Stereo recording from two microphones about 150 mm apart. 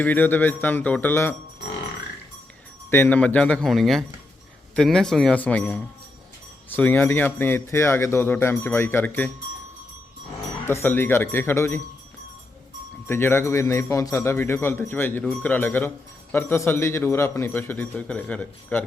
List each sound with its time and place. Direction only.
0.0 s speech: 10° left (ahead or behind)
2.9 s speech: 10° left (ahead or behind)
10.7 s speech: 15° left (ahead or behind)
13.1 s speech: 15° left (ahead or behind)